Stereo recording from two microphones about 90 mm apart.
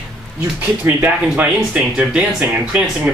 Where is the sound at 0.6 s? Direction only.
20° right (ahead or behind).